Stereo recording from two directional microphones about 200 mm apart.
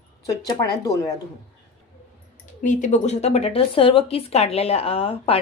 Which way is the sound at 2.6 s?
40° left (ahead or behind).